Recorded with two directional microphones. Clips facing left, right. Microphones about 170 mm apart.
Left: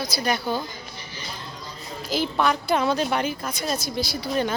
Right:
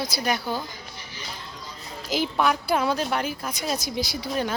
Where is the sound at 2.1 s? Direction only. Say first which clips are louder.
Even; 10° right (ahead or behind).